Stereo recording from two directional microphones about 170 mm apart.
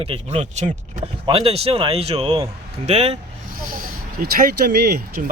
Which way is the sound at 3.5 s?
60° right (ahead or behind).